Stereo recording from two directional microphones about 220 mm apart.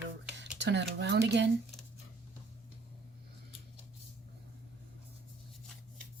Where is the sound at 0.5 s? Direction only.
50° right (ahead or behind).